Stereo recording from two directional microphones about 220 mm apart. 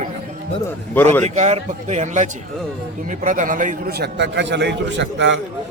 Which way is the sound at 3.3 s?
35° right (ahead or behind).